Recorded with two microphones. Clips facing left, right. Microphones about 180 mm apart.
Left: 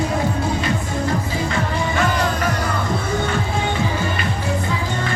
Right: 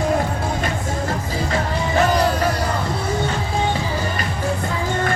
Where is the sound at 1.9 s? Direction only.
35° right (ahead or behind).